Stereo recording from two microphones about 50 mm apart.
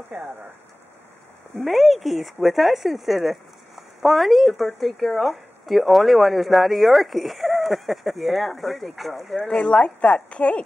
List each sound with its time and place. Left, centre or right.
0.1 s speech: centre
1.6 s speech: centre
9.4 s speech: centre